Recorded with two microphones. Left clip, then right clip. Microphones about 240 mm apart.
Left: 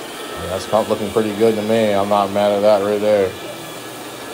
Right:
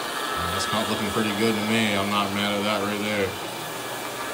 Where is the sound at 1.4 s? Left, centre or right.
Centre.